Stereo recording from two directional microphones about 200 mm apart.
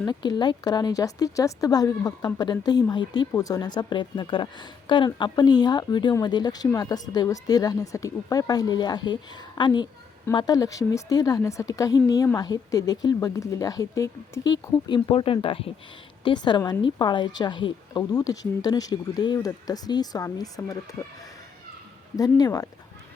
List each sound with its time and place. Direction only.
0.0 s a woman's voice: 20° left (ahead or behind)
22.1 s speech: 20° left (ahead or behind)